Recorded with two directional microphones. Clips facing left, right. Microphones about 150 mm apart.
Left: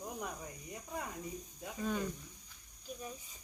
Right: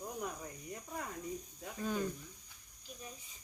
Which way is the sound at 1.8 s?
Centre (ahead or behind).